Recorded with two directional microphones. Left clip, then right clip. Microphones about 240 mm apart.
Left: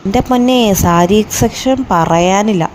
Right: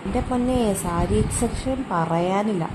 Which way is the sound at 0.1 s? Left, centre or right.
Left.